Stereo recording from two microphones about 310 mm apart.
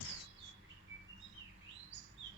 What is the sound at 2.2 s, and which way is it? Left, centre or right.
Chirp, centre.